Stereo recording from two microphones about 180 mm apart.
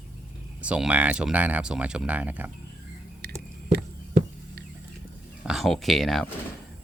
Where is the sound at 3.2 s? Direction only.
60° right (ahead or behind).